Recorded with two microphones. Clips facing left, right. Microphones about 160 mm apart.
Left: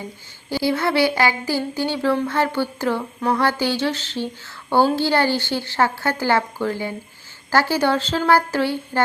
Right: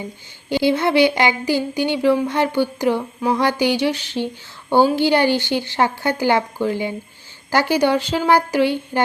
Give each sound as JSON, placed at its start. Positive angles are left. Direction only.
{"t": 0.5, "sound": "speech", "side_deg": -20}